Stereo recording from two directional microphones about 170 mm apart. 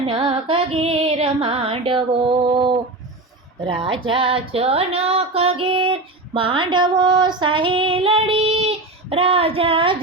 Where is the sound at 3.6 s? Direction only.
30° right (ahead or behind).